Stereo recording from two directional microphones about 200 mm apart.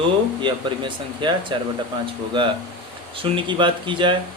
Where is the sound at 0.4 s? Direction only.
25° right (ahead or behind).